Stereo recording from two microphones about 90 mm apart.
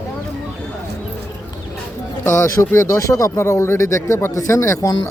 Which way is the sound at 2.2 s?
30° left (ahead or behind).